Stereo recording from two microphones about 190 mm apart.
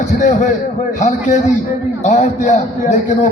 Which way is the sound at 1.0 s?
40° left (ahead or behind).